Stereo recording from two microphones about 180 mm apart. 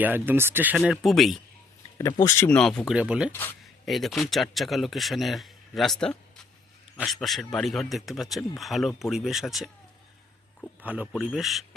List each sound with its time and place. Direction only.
0.0 s speech: 10° right (ahead or behind)
0.8 s a man's voice: centre (ahead or behind)
2.0 s speech: 20° left (ahead or behind)
2.6 s a man's voice: 5° left (ahead or behind)
10.8 s a man's voice: 5° right (ahead or behind)